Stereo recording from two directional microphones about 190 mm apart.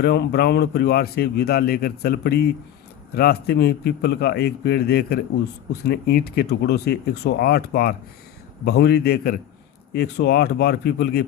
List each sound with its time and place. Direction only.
0.0 s speech: 60° left (ahead or behind)